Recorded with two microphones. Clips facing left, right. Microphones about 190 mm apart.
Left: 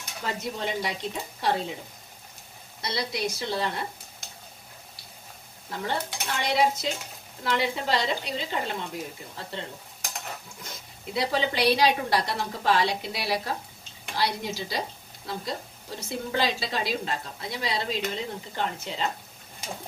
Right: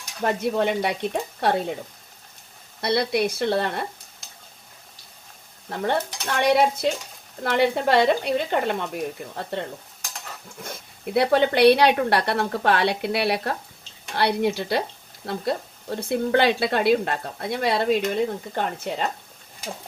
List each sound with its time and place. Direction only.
0.2 s speech: 60° right (ahead or behind)
2.8 s speech: 60° right (ahead or behind)
5.7 s speech: 55° right (ahead or behind)